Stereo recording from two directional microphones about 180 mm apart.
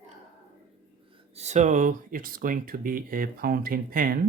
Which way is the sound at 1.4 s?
40° right (ahead or behind).